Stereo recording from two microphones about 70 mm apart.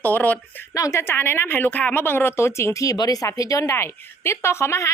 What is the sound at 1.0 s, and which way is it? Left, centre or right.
Speech, left.